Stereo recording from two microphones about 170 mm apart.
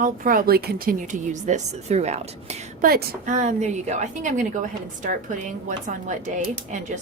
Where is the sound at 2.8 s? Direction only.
50° right (ahead or behind).